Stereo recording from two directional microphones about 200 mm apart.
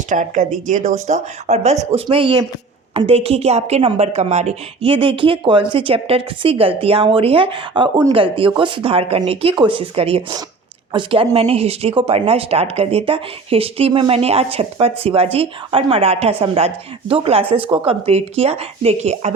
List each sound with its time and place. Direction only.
0.1 s speech: 40° right (ahead or behind)